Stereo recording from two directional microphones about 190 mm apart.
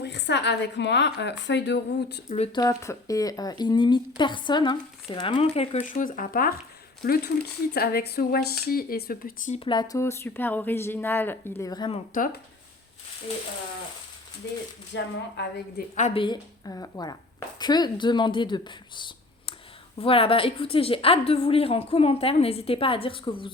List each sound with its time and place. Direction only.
0.0 s a woman's voice: 65° left (ahead or behind)
2.3 s speech: 30° left (ahead or behind)
2.6 s a woman's voice: 15° left (ahead or behind)
5.9 s speech: 45° left (ahead or behind)
9.6 s speech: 25° left (ahead or behind)
12.1 s speech: 45° left (ahead or behind)
14.9 s speech: 65° left (ahead or behind)
16.0 s speech: 40° left (ahead or behind)
16.2 s a woman's voice: 20° left (ahead or behind)